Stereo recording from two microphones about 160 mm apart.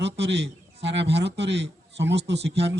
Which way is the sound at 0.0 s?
90° right.